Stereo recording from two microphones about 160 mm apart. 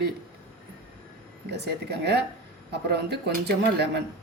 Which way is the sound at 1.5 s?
90° right.